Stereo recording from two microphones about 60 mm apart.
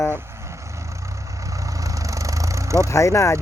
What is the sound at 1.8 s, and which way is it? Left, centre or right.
Vehicle, right.